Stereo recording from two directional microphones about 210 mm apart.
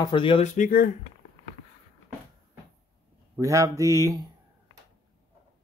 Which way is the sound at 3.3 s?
15° right (ahead or behind).